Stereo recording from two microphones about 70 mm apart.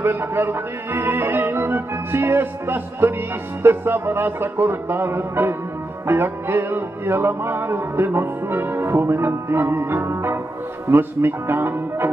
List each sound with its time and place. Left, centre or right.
0.0 s music: right